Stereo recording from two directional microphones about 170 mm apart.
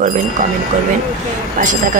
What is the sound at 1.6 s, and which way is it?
Speech, 55° right (ahead or behind).